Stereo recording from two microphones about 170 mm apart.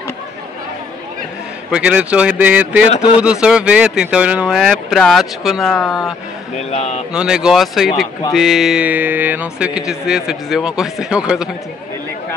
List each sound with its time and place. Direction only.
1.7 s speech: 5° right (ahead or behind)
2.9 s a man's voice: 40° left (ahead or behind)
3.2 s speech: 5° right (ahead or behind)
6.5 s a man's voice: 40° left (ahead or behind)
7.2 s speech: 5° right (ahead or behind)